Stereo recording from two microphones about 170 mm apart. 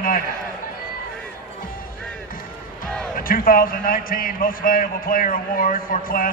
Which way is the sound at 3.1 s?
55° left (ahead or behind).